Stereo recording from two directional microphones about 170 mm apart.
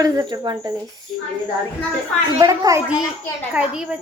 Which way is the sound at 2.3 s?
20° right (ahead or behind).